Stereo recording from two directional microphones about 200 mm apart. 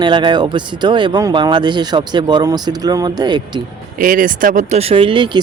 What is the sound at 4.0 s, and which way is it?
Speech, 40° right (ahead or behind).